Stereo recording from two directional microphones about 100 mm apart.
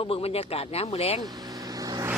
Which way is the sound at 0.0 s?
80° left.